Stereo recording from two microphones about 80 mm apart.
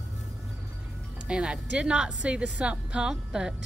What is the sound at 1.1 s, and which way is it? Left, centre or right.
A woman's voice, centre.